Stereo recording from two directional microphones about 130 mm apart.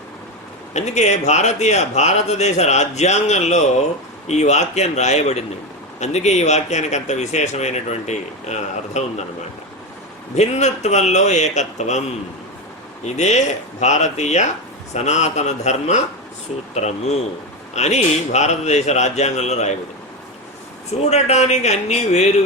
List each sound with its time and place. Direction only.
0.7 s speech: 60° left (ahead or behind)
10.3 s speech: 60° left (ahead or behind)
13.1 s speech: 60° left (ahead or behind)
21.1 s speech: 60° left (ahead or behind)